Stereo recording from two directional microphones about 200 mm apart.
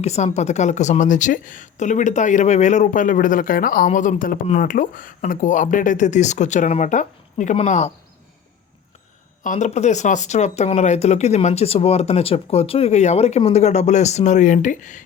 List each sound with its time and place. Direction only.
0.0 s speech: 35° left (ahead or behind)
9.4 s speech: 40° left (ahead or behind)